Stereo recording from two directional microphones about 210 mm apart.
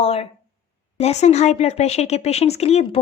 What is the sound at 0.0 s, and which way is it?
Speech, 25° left (ahead or behind).